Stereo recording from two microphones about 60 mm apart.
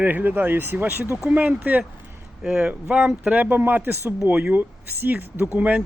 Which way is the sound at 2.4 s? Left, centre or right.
Centre.